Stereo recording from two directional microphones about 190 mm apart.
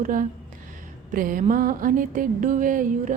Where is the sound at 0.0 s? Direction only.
45° right (ahead or behind).